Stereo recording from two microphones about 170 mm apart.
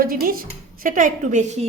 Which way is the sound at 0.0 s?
60° right (ahead or behind).